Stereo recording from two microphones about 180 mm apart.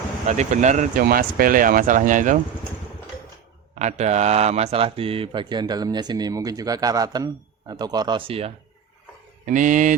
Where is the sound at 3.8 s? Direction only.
40° right (ahead or behind).